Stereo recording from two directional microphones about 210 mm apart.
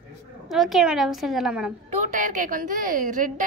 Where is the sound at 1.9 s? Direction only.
35° right (ahead or behind).